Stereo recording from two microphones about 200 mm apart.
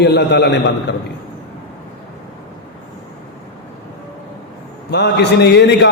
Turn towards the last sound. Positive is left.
turn(degrees=60)  # may be behind; listen again after turning